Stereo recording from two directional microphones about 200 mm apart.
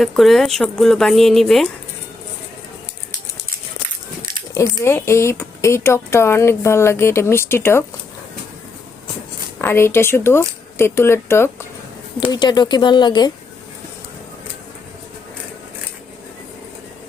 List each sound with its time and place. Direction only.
0.0 s speech: centre (ahead or behind)
4.5 s speech: 15° left (ahead or behind)
9.6 s speech: 10° left (ahead or behind)